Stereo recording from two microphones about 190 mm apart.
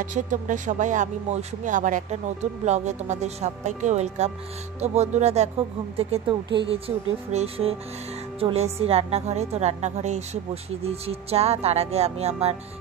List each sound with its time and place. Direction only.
0.0 s speech: 40° right (ahead or behind)